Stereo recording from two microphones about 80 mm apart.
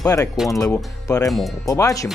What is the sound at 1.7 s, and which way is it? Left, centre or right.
Speech, left.